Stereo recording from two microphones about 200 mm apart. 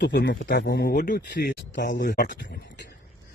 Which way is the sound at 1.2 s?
55° left (ahead or behind).